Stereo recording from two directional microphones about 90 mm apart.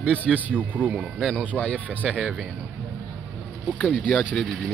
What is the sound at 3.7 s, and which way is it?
Speech, 15° left (ahead or behind).